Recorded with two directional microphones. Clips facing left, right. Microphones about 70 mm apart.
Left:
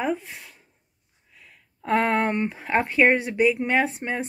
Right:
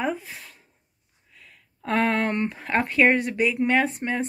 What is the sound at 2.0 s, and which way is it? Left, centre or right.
Speech, centre.